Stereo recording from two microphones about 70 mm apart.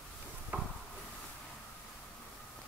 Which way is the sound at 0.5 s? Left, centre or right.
Right.